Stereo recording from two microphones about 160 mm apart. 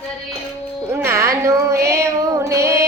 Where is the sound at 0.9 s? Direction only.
15° right (ahead or behind).